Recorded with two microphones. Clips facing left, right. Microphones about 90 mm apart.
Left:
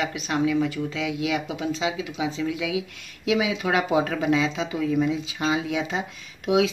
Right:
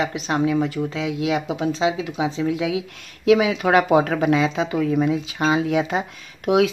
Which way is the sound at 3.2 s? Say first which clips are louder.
Right 7 dB; 55° right (ahead or behind).